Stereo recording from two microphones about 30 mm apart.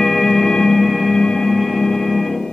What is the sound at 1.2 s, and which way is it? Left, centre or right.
Music, centre.